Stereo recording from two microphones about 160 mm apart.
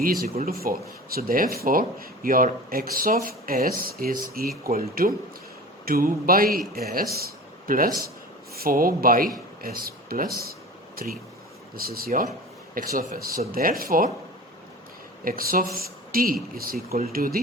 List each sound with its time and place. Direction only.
0.4 s speech: 65° right (ahead or behind)
8.5 s speech: 65° right (ahead or behind)
15.2 s speech: 65° right (ahead or behind)